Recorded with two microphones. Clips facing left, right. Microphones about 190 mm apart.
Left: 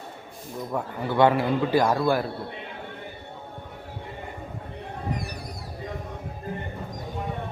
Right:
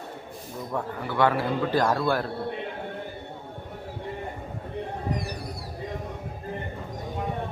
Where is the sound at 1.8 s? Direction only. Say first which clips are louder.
Left 2 dB; 10° left (ahead or behind).